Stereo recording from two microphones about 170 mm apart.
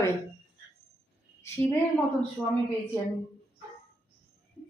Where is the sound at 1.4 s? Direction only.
15° left (ahead or behind).